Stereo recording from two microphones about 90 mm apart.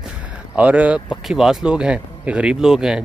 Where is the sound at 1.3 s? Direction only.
5° right (ahead or behind).